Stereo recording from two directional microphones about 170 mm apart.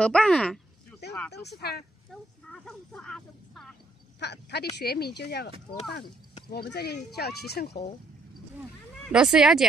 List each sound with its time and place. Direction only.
0.0 s speech: 5° left (ahead or behind)
1.3 s speech: 75° left (ahead or behind)
2.5 s speech: 5° left (ahead or behind)
4.2 s speech: 80° left
6.5 s speech: 70° left (ahead or behind)
9.1 s speech: 5° right (ahead or behind)